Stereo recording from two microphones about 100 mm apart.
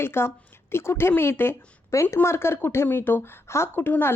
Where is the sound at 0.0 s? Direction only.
25° left (ahead or behind).